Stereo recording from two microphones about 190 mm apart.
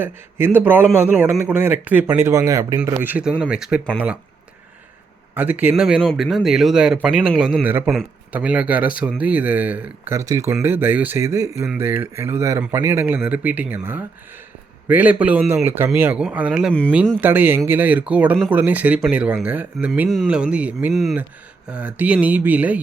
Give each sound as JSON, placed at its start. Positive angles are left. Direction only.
{"t": 0.0, "sound": "speech", "side_deg": -10}
{"t": 5.3, "sound": "a man's voice", "side_deg": -10}